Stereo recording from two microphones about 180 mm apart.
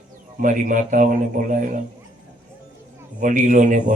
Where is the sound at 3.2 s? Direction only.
45° right (ahead or behind).